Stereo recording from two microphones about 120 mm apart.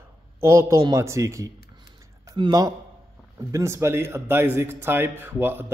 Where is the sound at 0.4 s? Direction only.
20° right (ahead or behind).